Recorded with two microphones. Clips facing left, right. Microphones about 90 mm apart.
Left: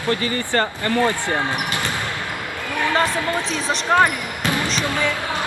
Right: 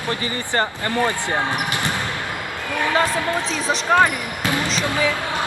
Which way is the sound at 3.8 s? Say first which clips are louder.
Even; 15° left (ahead or behind).